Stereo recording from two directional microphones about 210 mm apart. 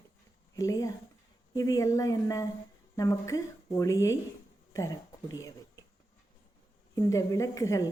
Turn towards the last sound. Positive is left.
turn(degrees=15)  # may be behind; listen again after turning